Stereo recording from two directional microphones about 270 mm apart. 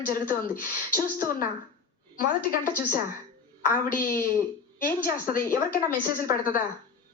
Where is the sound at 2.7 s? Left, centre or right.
Left.